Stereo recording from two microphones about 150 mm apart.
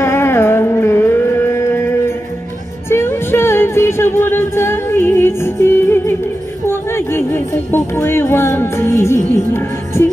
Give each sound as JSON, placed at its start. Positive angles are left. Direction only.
{"t": 0.0, "sound": "music", "side_deg": 15}
{"t": 6.7, "sound": "speech", "side_deg": 15}